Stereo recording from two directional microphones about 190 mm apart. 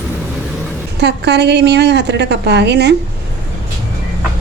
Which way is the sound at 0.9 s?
60° right (ahead or behind).